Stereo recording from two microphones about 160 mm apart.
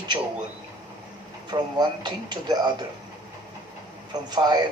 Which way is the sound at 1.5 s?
25° right (ahead or behind).